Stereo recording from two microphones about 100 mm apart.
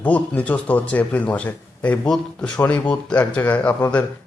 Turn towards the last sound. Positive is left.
turn(degrees=15)  # may be behind; listen again after turning